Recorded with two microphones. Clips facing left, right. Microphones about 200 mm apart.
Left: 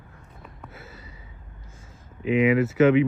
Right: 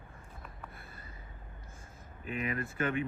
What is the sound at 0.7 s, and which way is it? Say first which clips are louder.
Gasp: left 7 dB; 85° left.